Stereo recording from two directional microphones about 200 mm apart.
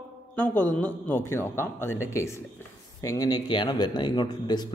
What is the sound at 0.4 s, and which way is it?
A man's voice, 10° left (ahead or behind).